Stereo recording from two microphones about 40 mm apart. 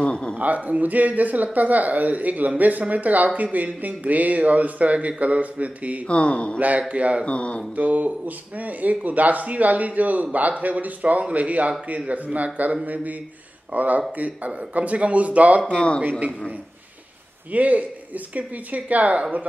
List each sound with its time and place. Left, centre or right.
0.0 s a sound: left
0.4 s speech: right
6.0 s a man's voice: left
6.8 s speech: right
7.2 s a man's voice: left
7.7 s speech: right
15.7 s a man's voice: left
16.0 s speech: right
17.5 s speech: right